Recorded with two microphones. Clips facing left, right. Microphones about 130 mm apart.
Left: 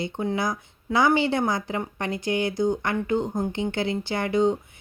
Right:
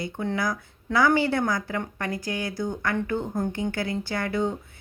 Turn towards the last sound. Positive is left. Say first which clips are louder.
# left 4 dB
turn(degrees=20)  # may be behind; listen again after turning